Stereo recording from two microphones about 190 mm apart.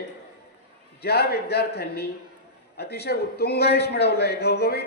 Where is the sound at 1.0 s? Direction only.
55° left (ahead or behind).